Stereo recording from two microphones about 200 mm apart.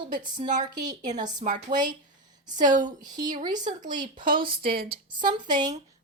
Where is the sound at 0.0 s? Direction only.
25° right (ahead or behind).